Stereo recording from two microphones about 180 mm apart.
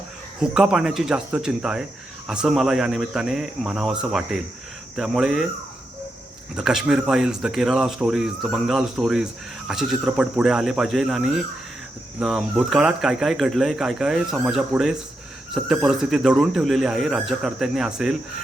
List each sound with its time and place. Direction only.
0.3 s speech: 5° right (ahead or behind)
6.6 s speech: 5° right (ahead or behind)